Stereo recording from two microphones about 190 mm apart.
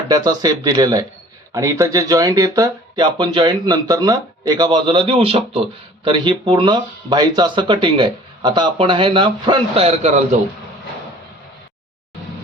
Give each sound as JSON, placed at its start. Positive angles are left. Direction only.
{"t": 0.1, "sound": "speech", "side_deg": -20}